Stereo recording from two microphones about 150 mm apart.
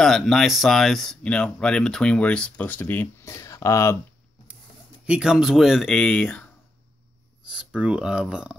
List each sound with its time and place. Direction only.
0.0 s speech: centre (ahead or behind); by 4.0 s 20° left (ahead or behind)
5.0 s speech: 5° right (ahead or behind)
7.4 s speech: 5° right (ahead or behind)